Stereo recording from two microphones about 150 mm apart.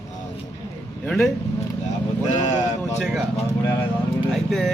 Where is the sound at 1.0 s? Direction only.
5° left (ahead or behind).